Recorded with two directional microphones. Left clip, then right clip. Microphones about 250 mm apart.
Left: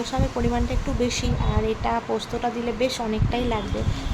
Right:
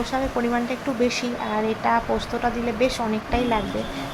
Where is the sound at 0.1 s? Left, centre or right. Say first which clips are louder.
Right 3 dB; centre.